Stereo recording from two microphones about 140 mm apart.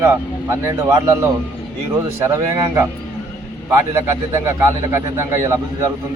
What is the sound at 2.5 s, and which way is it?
A man's voice, 20° right (ahead or behind).